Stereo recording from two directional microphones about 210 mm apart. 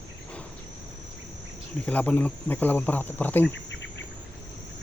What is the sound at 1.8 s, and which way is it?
Speech, 5° left (ahead or behind).